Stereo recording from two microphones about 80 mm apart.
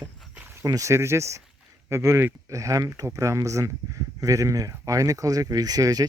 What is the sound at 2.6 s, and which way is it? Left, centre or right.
Speech, right.